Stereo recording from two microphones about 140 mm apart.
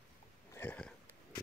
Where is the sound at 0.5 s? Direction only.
10° left (ahead or behind).